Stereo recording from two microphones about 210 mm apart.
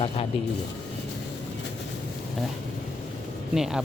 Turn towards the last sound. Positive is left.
turn(degrees=0)  # may be behind; listen again after turning